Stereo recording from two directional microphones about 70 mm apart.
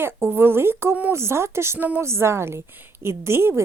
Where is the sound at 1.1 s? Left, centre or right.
Right.